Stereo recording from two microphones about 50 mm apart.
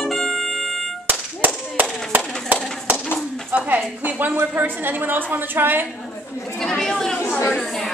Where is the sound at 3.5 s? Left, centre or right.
Right.